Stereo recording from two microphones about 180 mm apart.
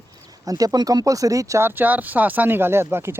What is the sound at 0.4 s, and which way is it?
Speech, 20° right (ahead or behind).